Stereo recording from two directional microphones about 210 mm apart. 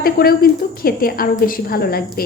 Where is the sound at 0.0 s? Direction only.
45° left (ahead or behind).